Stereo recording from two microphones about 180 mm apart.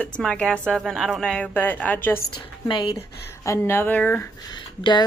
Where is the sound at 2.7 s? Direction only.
25° left (ahead or behind).